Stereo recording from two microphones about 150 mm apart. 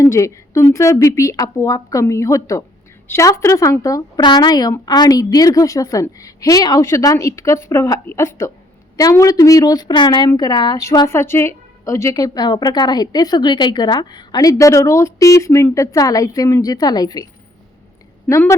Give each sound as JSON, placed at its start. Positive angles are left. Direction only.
{"t": 0.0, "sound": "a woman's voice", "side_deg": 20}
{"t": 11.1, "sound": "a woman's voice", "side_deg": 15}
{"t": 18.3, "sound": "a woman's voice", "side_deg": 20}